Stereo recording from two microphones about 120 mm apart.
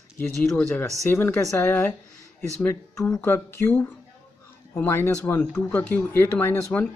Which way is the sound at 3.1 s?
15° left (ahead or behind).